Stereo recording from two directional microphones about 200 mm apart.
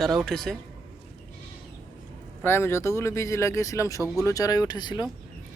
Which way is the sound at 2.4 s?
10° left (ahead or behind).